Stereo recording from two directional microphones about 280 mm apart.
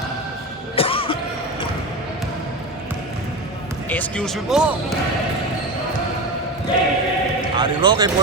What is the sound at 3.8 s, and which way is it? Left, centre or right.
Speech, centre.